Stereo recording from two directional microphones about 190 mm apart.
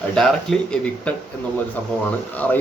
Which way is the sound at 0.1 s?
5° left (ahead or behind).